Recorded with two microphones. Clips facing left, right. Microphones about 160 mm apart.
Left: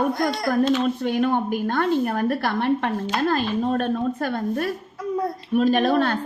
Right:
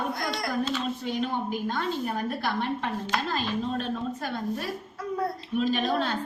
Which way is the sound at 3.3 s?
55° left (ahead or behind).